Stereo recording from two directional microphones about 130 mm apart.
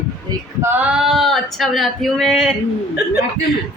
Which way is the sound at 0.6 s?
15° right (ahead or behind).